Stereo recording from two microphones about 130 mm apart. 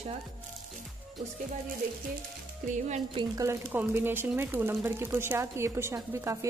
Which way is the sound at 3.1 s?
25° right (ahead or behind).